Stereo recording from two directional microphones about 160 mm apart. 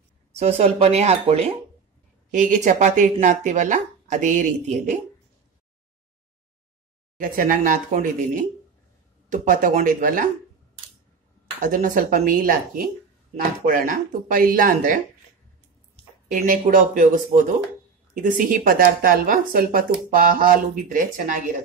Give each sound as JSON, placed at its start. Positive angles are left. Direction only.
{"t": 0.4, "sound": "speech", "side_deg": -40}
{"t": 2.3, "sound": "speech", "side_deg": -55}
{"t": 7.2, "sound": "a woman's voice", "side_deg": -55}
{"t": 11.6, "sound": "a woman's voice", "side_deg": -55}
{"t": 16.4, "sound": "a woman's voice", "side_deg": -60}